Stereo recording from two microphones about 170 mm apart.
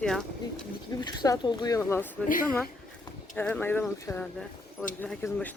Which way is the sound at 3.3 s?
10° left (ahead or behind).